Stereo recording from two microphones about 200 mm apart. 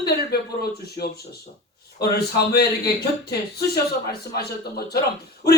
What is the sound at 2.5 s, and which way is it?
Speech, 50° left (ahead or behind).